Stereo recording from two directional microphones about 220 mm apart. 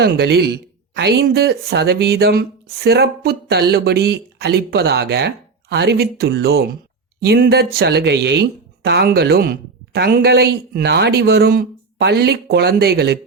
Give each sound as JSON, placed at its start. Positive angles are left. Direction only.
{"t": 0.0, "sound": "speech", "side_deg": -50}